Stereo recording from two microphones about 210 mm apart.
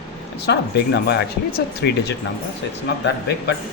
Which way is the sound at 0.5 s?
55° left (ahead or behind).